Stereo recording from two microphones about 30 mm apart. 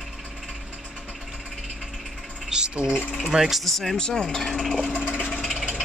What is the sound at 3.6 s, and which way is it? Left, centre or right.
Speech, centre.